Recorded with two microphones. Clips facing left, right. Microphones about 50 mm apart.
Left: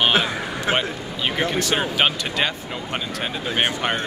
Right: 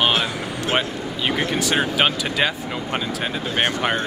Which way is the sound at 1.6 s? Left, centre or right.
Centre.